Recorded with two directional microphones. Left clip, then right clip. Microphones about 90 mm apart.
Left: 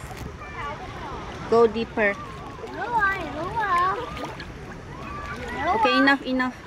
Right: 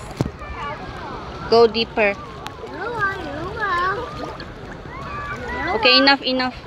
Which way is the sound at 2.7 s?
25° left (ahead or behind).